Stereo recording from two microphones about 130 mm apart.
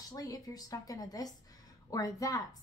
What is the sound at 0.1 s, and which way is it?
A woman's voice, 25° left (ahead or behind).